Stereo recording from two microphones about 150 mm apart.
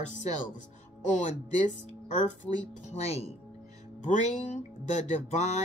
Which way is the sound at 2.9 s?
45° left (ahead or behind).